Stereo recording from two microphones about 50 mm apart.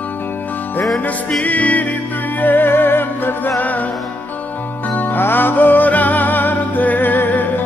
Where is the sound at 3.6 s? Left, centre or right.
Left.